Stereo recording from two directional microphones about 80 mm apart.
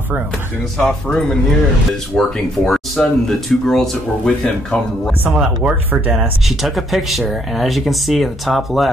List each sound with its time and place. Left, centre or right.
0.7 s speech: centre
5.9 s speech: right
6.1 s speech: centre